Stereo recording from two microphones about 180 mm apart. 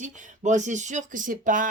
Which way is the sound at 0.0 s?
45° right (ahead or behind).